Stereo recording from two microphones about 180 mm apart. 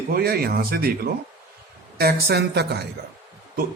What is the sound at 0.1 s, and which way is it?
Speech, 55° right (ahead or behind).